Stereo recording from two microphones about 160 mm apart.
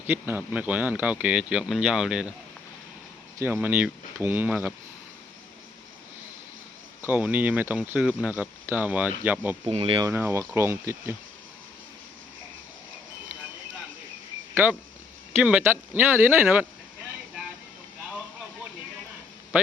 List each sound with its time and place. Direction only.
0.1 s speech: 10° right (ahead or behind)
3.3 s speech: 10° right (ahead or behind)
7.1 s speech: 10° right (ahead or behind)
9.6 s speech: 35° right (ahead or behind)
10.1 s speech: 15° right (ahead or behind)
14.5 s speech: 10° right (ahead or behind)